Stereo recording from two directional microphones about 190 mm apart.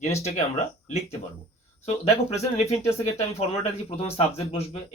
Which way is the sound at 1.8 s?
35° left (ahead or behind).